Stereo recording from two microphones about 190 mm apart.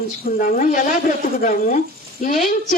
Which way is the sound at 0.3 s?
45° left (ahead or behind).